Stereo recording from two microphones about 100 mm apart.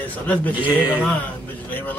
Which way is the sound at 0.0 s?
15° left (ahead or behind).